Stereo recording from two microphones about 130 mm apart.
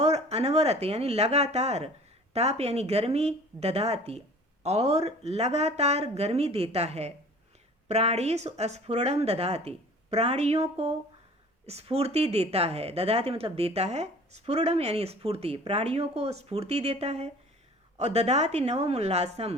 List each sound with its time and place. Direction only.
0.0 s a woman's voice: 55° right (ahead or behind)